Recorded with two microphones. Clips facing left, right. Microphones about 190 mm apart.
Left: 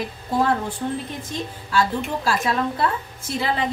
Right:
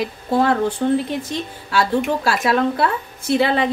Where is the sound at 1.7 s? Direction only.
75° right (ahead or behind).